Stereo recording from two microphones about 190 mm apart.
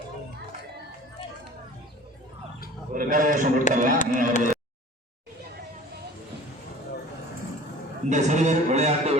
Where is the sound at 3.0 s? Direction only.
45° right (ahead or behind).